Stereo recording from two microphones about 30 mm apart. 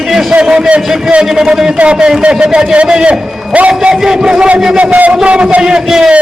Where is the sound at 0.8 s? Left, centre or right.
Centre.